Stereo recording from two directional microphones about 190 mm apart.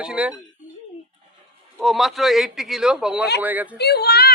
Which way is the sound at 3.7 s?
60° left (ahead or behind).